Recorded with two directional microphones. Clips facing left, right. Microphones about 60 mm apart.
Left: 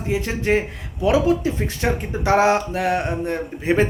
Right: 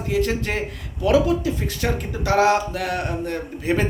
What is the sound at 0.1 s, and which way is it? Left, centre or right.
Speech, left.